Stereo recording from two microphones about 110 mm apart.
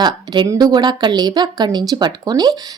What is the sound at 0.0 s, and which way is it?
A woman's voice, 40° right (ahead or behind).